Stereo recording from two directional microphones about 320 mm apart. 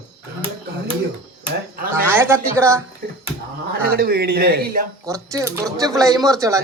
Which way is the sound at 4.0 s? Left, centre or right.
Right.